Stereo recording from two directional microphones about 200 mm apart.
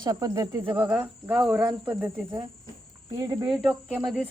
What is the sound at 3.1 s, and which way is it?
Speech, 20° right (ahead or behind).